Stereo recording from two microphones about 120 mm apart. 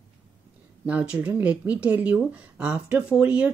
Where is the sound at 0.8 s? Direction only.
10° right (ahead or behind).